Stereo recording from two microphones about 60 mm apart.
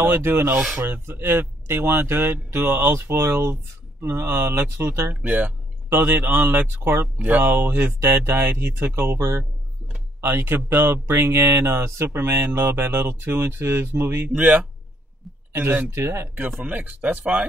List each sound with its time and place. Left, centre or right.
0.0 s speech: right
4.0 s speech: right
4.3 s speech: right
5.2 s a sound: right
5.9 s speech: right
7.4 s speech: right
14.3 s speech: right
16.3 s speech: right